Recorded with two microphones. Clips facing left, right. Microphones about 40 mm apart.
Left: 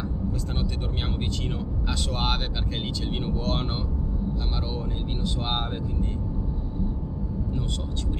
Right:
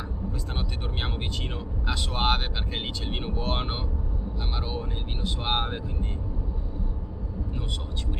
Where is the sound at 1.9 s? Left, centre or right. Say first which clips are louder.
Right 3 dB; centre.